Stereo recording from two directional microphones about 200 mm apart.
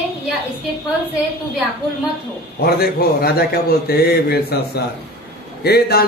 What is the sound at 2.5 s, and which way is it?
A man's voice, 50° left (ahead or behind).